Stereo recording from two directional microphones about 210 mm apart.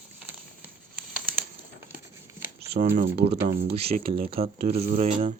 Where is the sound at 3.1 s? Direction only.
30° right (ahead or behind).